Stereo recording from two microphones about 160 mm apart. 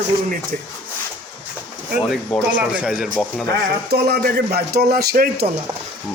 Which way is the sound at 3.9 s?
80° right.